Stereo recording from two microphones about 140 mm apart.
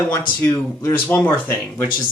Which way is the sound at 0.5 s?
25° left (ahead or behind).